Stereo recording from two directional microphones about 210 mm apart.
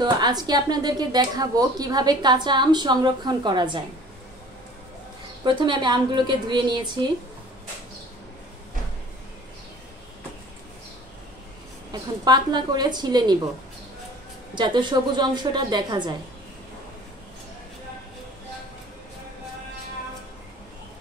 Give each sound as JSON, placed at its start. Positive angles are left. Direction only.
{"t": 0.0, "sound": "a woman's voice", "side_deg": -20}
{"t": 5.4, "sound": "a woman's voice", "side_deg": -20}
{"t": 11.9, "sound": "a woman's voice", "side_deg": -20}
{"t": 14.5, "sound": "a woman's voice", "side_deg": -20}